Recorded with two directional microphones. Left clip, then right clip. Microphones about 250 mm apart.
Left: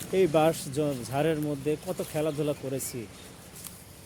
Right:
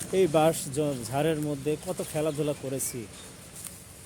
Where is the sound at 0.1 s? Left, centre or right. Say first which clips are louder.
Even; centre.